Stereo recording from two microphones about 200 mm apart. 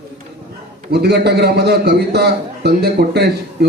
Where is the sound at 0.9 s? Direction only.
55° right (ahead or behind).